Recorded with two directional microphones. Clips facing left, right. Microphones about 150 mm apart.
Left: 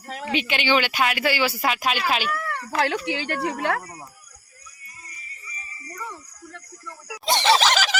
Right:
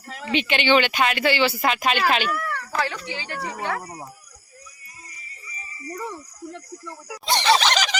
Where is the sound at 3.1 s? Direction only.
70° left (ahead or behind).